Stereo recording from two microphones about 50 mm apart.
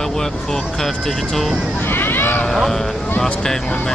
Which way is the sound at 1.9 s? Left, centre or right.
Left.